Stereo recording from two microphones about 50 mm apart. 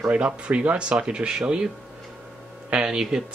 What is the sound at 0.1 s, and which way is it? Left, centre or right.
Speech, right.